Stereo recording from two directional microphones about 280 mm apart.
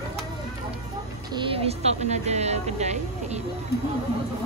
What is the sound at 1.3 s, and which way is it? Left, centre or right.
A woman's voice, centre.